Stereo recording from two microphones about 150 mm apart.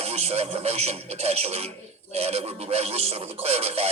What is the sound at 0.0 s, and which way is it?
Speech, 45° right (ahead or behind).